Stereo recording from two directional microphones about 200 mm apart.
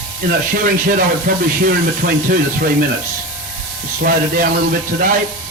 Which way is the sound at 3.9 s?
45° right (ahead or behind).